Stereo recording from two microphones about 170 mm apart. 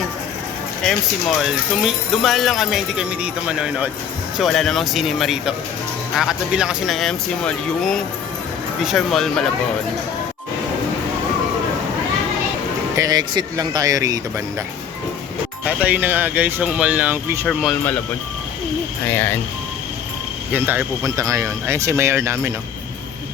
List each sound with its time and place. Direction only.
0.9 s speech: centre (ahead or behind)
13.0 s speech: 25° right (ahead or behind)
15.6 s speech: 10° right (ahead or behind)
17.4 s speech: centre (ahead or behind)
19.0 s speech: 10° left (ahead or behind)
20.5 s speech: 10° right (ahead or behind)